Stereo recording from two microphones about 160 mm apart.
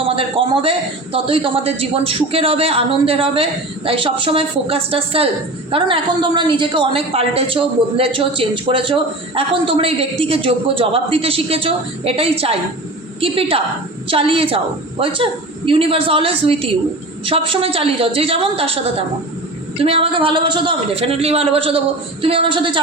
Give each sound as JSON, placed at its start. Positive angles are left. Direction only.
{"t": 0.0, "sound": "a woman's voice", "side_deg": -35}